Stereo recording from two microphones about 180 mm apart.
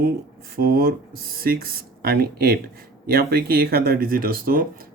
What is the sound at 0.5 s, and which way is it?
Speech, 55° right (ahead or behind).